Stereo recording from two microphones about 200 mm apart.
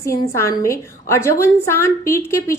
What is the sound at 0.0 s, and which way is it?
A woman's voice, 15° left (ahead or behind).